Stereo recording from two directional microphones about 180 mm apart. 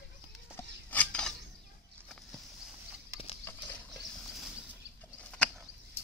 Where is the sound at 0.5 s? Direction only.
10° left (ahead or behind).